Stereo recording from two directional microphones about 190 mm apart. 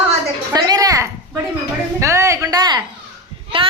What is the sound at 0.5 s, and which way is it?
A child's voice, 20° right (ahead or behind).